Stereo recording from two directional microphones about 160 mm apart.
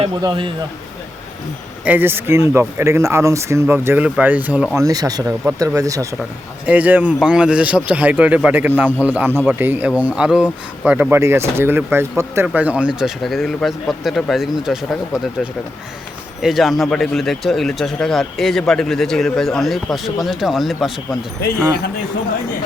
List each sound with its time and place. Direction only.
0.2 s speech: 30° right (ahead or behind)
1.8 s speech: 10° right (ahead or behind)
4.8 s speech: 25° right (ahead or behind)
6.7 s speech: 10° right (ahead or behind)
16.4 s speech: centre (ahead or behind)